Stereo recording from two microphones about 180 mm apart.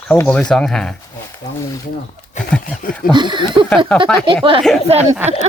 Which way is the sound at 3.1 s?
25° right (ahead or behind).